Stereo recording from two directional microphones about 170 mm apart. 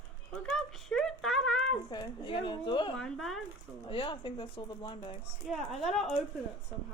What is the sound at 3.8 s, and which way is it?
Speech, 30° left (ahead or behind).